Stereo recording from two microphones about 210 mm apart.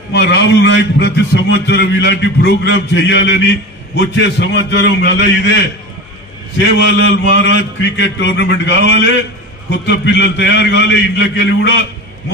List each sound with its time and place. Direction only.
0.1 s a man's voice: 55° left (ahead or behind)
6.8 s a man's voice: 60° left (ahead or behind)